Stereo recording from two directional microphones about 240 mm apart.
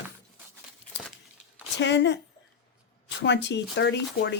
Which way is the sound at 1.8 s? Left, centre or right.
Left.